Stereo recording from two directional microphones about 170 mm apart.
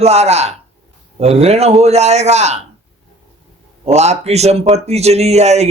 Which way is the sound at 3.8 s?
40° right (ahead or behind).